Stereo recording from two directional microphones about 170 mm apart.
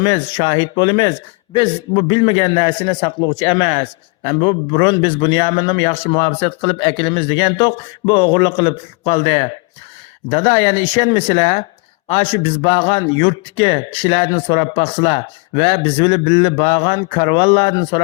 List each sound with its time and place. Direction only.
0.0 s a man's voice: 30° left (ahead or behind)